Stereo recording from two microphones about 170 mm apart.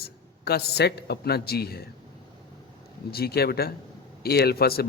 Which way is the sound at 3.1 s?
65° left (ahead or behind).